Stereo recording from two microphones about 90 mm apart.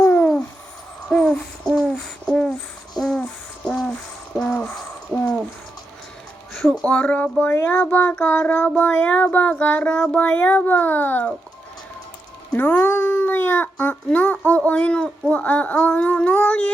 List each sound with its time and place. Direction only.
0.0 s owl: 15° left (ahead or behind)
1.1 s hoot: 5° left (ahead or behind)
3.0 s a sound: 5° left (ahead or behind)
4.4 s a sound: 15° left (ahead or behind)
5.1 s a sound: centre (ahead or behind)
6.5 s music: centre (ahead or behind)
6.8 s child singing: 10° left (ahead or behind)
7.5 s speech: 20° left (ahead or behind)
8.7 s child singing: 15° left (ahead or behind)
12.5 s cat: 20° left (ahead or behind)
15.3 s child singing: 15° left (ahead or behind)